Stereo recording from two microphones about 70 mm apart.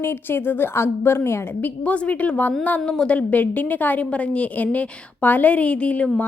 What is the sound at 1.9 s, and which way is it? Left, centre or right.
Speech, centre.